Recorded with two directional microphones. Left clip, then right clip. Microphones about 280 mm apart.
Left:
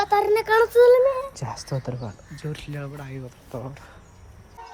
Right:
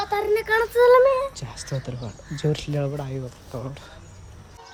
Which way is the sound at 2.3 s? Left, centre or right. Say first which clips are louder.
Right 10 dB; centre.